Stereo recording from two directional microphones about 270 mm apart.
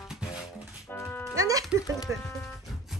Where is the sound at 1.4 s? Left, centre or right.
Centre.